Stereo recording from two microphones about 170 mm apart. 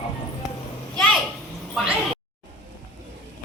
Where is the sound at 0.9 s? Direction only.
5° left (ahead or behind).